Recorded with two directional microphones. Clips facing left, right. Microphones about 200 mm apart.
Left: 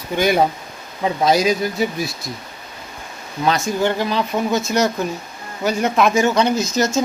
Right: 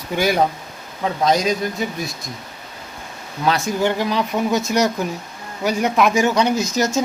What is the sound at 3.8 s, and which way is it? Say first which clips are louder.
Speech: even; 15° right (ahead or behind).